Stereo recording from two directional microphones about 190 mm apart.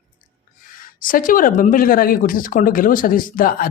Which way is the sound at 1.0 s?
45° left (ahead or behind).